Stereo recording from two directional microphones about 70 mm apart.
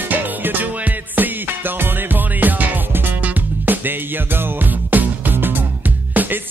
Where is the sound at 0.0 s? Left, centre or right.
Right.